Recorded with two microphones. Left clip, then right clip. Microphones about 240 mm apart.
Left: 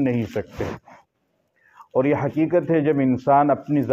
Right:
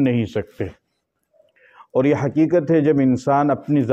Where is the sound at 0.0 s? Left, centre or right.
Right.